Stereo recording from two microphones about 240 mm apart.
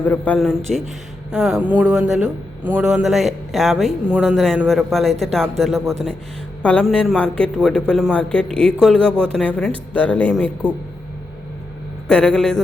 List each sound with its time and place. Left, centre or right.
0.0 s speech: centre
12.0 s speech: centre